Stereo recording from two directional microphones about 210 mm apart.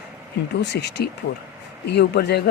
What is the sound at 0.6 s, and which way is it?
Speech, 55° left (ahead or behind).